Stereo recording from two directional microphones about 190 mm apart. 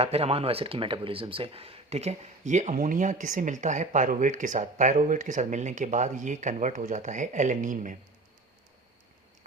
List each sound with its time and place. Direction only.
0.0 s speech: 30° right (ahead or behind)